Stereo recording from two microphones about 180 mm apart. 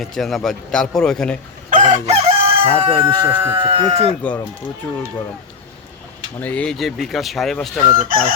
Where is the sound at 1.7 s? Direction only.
45° right (ahead or behind).